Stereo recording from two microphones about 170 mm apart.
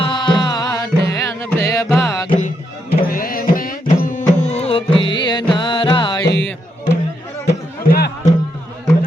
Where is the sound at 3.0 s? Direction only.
60° left (ahead or behind).